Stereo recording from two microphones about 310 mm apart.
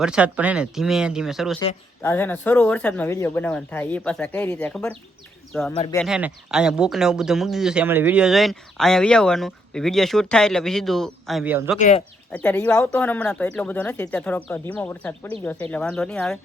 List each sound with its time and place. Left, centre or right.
0.0 s speech: centre
1.5 s speech: centre
5.7 s speech: centre
6.0 s speech: centre
11.8 s speech: left
12.3 s speech: centre